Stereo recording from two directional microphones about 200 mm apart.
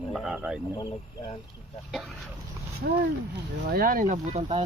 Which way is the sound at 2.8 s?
50° right (ahead or behind).